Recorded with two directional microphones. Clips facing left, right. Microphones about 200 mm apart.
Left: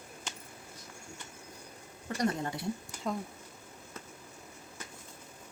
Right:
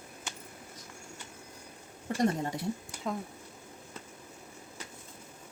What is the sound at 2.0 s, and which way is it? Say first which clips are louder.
Speech: right 3 dB; 25° right (ahead or behind).